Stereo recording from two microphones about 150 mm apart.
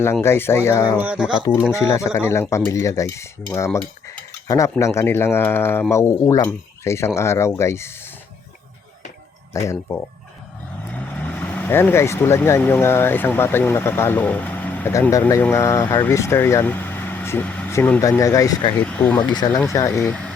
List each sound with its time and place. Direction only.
0.0 s speech: 15° left (ahead or behind)
0.9 s speech: 10° right (ahead or behind)
1.7 s speech: 20° left (ahead or behind)
9.5 s speech: 20° left (ahead or behind)
10.9 s speech: 10° left (ahead or behind)
18.8 s speech: 10° left (ahead or behind)
19.2 s speech: 30° left (ahead or behind)